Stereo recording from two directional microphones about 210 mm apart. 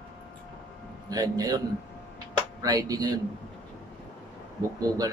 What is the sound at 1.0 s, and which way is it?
Speech, 15° right (ahead or behind).